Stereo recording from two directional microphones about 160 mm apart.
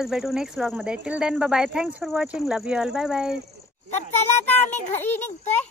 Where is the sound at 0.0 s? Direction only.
5° right (ahead or behind).